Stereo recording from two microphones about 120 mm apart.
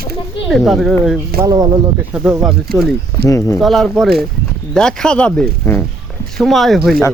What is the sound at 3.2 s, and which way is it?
Speech, 25° left (ahead or behind).